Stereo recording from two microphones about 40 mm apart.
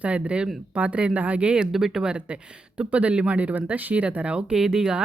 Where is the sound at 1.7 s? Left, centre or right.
Centre.